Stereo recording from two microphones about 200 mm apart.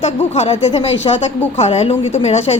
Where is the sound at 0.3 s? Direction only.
30° left (ahead or behind).